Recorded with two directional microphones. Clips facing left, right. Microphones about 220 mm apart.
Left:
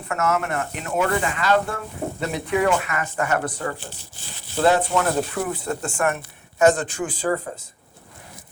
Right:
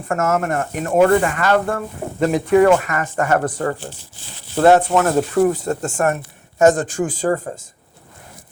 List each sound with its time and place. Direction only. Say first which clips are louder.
0.1 s speech: right 4 dB; 45° right (ahead or behind)